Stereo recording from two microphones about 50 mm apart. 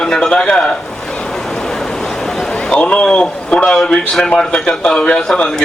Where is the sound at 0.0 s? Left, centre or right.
Centre.